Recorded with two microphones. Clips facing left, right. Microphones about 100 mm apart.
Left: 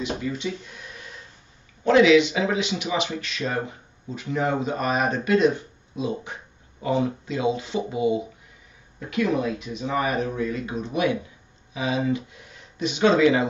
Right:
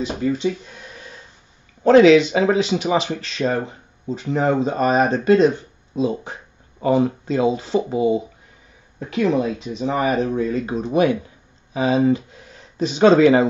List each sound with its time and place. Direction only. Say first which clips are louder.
0.2 s speech: right 8 dB; 35° right (ahead or behind)
1.9 s speech: right 5 dB; 40° right (ahead or behind)